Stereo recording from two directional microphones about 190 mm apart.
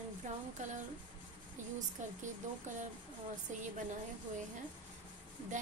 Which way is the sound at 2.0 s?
40° right (ahead or behind).